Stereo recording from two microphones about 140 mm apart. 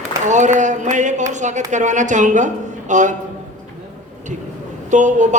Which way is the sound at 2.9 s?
60° right (ahead or behind).